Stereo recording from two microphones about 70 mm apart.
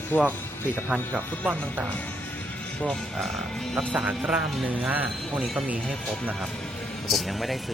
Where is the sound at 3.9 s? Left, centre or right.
Centre.